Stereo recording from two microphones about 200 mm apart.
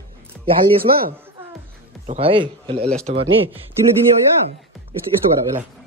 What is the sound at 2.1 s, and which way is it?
A man's voice, 30° right (ahead or behind).